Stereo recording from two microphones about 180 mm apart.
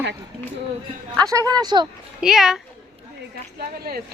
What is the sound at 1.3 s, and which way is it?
Speech, 20° right (ahead or behind).